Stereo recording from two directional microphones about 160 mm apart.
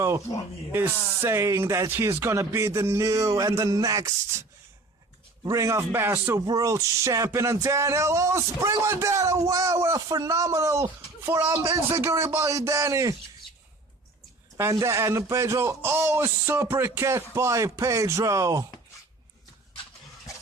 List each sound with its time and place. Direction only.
0.3 s speech: 25° left (ahead or behind)
0.7 s a man's voice: 15° right (ahead or behind)
14.6 s a man's voice: 20° right (ahead or behind)